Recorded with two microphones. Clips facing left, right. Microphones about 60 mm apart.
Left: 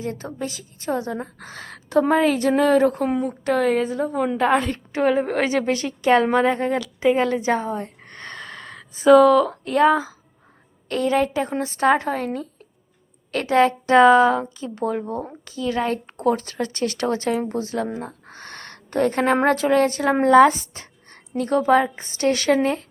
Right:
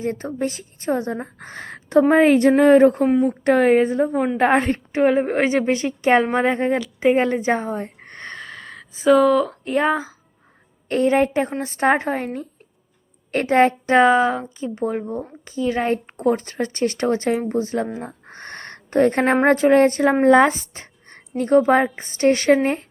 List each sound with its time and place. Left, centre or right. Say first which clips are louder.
0.0 s a woman's voice: right 5 dB; right
8.4 s a sound: right 1 dB; centre
9.0 s speech: left 2 dB; centre
9.6 s a woman's voice: left 3 dB; right
13.9 s speech: left 4 dB; centre
18.0 s a sound: right 1 dB; right
19.5 s a woman's voice: right 4 dB; right